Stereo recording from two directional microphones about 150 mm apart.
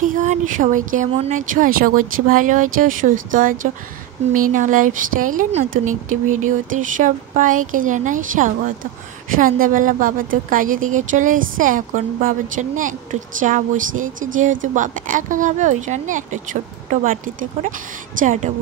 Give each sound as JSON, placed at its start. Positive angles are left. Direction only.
{"t": 0.0, "sound": "a woman's voice", "side_deg": -60}